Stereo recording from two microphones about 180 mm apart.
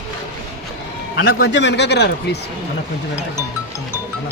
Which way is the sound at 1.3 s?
65° left (ahead or behind).